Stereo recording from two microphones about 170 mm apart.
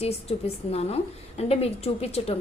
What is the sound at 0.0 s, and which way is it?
A woman's voice, 35° left (ahead or behind).